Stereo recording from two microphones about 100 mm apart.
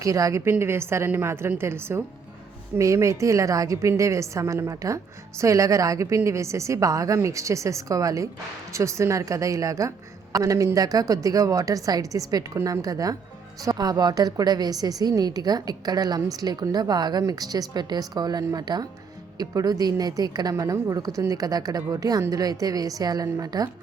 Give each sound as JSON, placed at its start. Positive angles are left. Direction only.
{"t": 0.0, "sound": "a woman's voice", "side_deg": -35}